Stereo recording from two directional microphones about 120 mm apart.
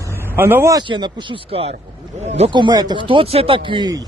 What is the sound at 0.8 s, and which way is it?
Speech, 40° right (ahead or behind).